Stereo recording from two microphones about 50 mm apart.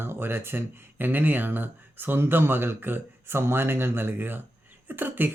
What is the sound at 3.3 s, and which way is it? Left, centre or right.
Speech, right.